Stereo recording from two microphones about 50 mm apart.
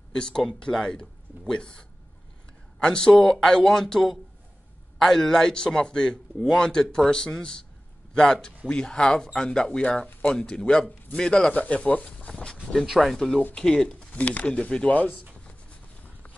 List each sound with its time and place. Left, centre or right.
0.1 s speech: centre
9.7 s speech: left
11.5 s speech: left
12.2 s a sound: left
13.0 s speech: centre
13.9 s speech: left
15.0 s speech: left
15.3 s a sound: left